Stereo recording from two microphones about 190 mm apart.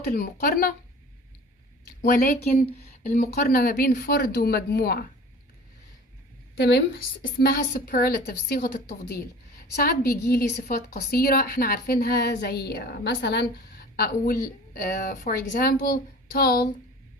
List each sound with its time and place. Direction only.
0.1 s a woman's voice: 50° left (ahead or behind)
2.0 s a woman's voice: 55° left (ahead or behind)
6.6 s a woman's voice: 60° left (ahead or behind)